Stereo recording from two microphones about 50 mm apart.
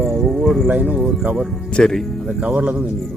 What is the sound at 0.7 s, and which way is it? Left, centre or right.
Speech, right.